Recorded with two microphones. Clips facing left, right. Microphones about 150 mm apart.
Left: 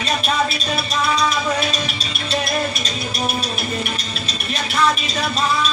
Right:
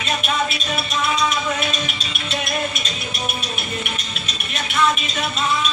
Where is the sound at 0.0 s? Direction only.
35° left (ahead or behind).